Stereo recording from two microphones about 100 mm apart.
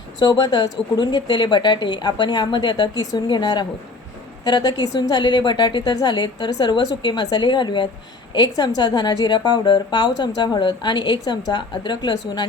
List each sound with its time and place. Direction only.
0.3 s a woman's voice: 45° left (ahead or behind)